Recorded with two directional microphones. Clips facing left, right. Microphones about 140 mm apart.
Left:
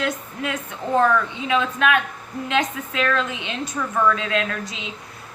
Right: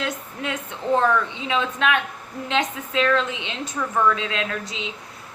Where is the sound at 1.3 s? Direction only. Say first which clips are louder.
Left 2 dB; 20° right (ahead or behind).